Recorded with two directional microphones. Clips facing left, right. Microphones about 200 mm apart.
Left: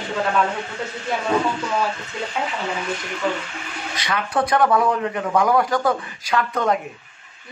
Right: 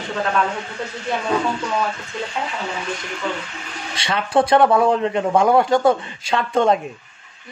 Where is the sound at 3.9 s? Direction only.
30° right (ahead or behind).